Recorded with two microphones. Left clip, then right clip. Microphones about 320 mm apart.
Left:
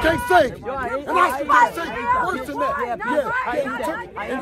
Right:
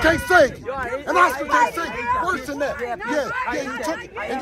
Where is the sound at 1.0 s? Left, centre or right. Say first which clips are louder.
Right 1 dB; centre.